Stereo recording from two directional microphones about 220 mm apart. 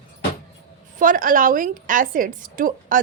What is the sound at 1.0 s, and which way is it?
A woman's voice, 40° right (ahead or behind).